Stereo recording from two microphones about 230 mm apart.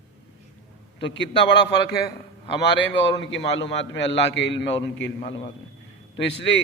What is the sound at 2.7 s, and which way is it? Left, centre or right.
A man's voice, left.